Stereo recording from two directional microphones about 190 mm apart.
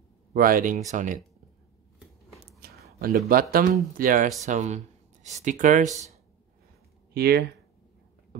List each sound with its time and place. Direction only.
0.3 s speech: 50° right (ahead or behind)
2.6 s a sound: 55° right (ahead or behind)
3.3 s speech: 50° right (ahead or behind)
7.2 s speech: 55° right (ahead or behind)